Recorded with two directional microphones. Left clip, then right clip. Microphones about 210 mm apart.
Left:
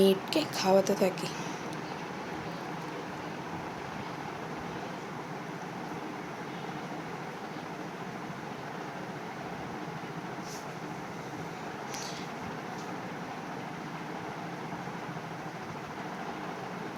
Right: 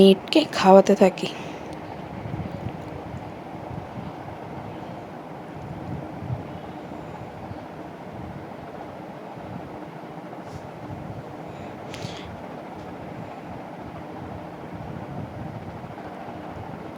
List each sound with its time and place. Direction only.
0.0 s a woman's voice: 40° right (ahead or behind)